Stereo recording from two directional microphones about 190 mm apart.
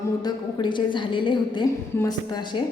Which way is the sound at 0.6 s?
25° left (ahead or behind).